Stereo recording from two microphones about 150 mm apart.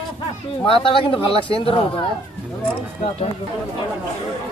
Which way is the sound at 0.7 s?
35° left (ahead or behind).